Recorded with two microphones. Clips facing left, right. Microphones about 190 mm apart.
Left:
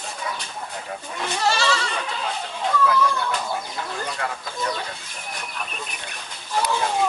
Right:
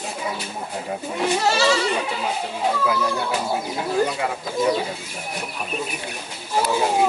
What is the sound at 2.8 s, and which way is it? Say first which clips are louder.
Speech: left 1 dB; 10° right (ahead or behind).